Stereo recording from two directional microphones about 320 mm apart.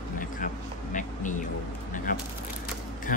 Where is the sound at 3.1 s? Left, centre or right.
Left.